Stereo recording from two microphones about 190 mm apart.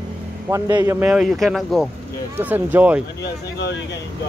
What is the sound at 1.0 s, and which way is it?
Speech, 5° right (ahead or behind).